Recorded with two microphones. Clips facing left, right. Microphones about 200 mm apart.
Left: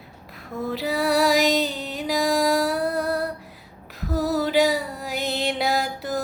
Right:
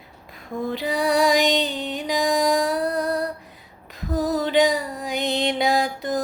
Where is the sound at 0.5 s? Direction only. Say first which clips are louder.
Right 1 dB; 5° left (ahead or behind).